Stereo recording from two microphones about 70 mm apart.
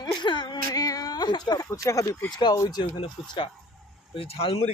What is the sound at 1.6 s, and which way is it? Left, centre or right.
Speech, left.